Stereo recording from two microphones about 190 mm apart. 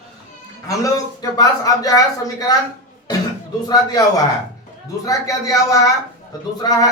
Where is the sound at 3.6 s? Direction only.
20° left (ahead or behind).